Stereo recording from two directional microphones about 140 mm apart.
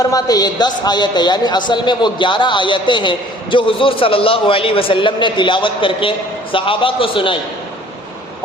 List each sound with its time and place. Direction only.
0.0 s a man's voice: 25° left (ahead or behind)